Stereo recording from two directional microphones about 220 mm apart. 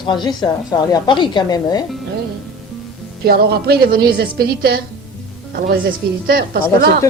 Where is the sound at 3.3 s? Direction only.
45° right (ahead or behind).